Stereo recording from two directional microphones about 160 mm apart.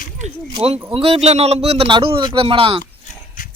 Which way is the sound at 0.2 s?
45° right (ahead or behind).